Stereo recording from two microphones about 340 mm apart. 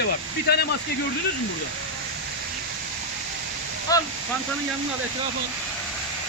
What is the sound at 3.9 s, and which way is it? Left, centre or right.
Speech, centre.